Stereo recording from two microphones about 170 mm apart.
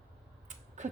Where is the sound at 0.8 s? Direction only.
45° right (ahead or behind).